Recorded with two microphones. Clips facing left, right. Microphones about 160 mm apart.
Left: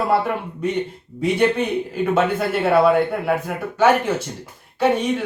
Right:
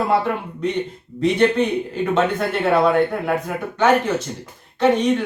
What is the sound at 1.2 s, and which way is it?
Speech, 10° left (ahead or behind).